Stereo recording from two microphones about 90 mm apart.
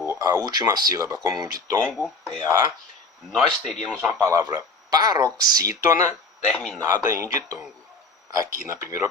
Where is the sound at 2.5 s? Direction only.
45° right (ahead or behind).